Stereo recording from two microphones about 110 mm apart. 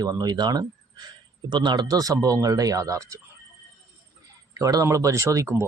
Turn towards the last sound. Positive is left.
turn(degrees=-25)  # may be behind; listen again after turning